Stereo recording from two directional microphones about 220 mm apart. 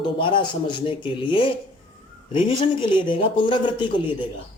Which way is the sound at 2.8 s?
20° left (ahead or behind).